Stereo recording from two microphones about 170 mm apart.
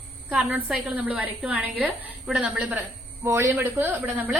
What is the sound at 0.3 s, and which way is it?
A woman's voice, 5° right (ahead or behind).